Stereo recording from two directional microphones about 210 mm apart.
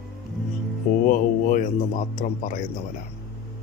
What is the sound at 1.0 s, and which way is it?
A man's voice, 40° left (ahead or behind).